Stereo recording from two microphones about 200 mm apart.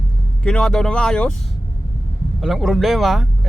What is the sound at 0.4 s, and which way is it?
Speech, 5° left (ahead or behind).